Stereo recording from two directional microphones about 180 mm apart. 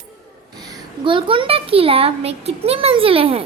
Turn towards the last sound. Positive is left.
turn(degrees=-30)  # may be behind; listen again after turning